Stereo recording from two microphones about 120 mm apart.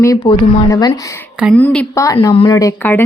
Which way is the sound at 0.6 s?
30° left (ahead or behind).